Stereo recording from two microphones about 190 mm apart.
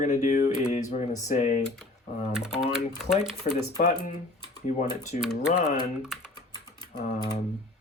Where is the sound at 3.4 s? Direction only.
35° left (ahead or behind).